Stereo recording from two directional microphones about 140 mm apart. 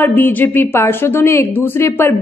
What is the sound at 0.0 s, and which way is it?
A woman's voice, 15° left (ahead or behind).